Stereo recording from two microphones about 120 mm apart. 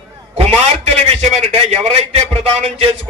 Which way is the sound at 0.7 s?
65° right (ahead or behind).